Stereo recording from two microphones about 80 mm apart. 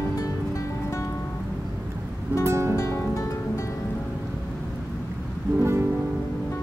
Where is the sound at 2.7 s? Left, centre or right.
Left.